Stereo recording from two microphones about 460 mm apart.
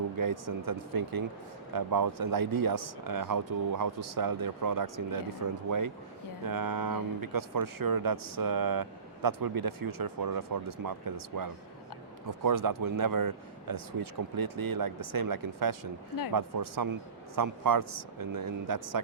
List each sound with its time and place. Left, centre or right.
0.2 s speech: right